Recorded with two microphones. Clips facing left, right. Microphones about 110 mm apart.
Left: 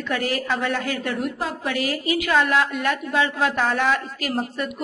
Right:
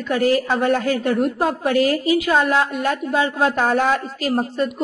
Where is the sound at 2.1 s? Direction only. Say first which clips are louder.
Right 3 dB; 25° right (ahead or behind).